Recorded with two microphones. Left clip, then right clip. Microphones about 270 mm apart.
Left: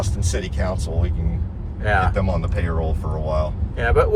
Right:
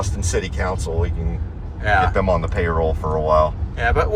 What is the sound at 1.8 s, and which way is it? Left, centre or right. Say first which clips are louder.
Speech: right 3 dB; centre.